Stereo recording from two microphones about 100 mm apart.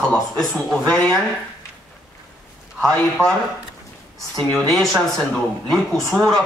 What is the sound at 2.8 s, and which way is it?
Speech, 5° left (ahead or behind).